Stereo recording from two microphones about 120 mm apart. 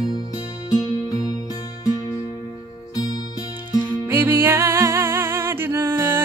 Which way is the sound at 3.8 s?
15° right (ahead or behind).